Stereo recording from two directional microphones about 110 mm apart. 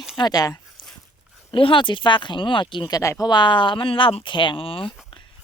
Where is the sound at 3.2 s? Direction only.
45° left (ahead or behind).